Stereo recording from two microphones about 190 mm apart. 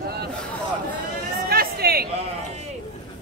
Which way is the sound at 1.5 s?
55° right (ahead or behind).